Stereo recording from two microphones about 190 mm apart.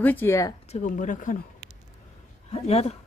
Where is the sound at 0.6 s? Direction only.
40° left (ahead or behind).